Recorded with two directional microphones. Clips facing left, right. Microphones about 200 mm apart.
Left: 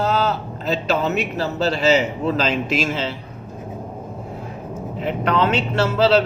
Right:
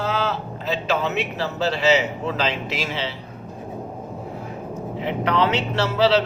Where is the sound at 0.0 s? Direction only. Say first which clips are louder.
Left 4 dB; 40° left (ahead or behind).